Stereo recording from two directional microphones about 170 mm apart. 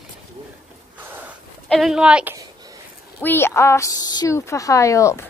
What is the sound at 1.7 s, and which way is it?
Speech, centre (ahead or behind).